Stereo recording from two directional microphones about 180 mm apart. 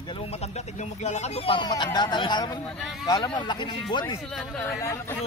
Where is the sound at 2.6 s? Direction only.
Centre (ahead or behind).